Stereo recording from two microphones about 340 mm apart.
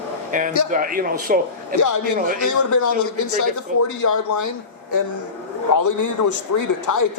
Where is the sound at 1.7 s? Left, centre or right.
Left.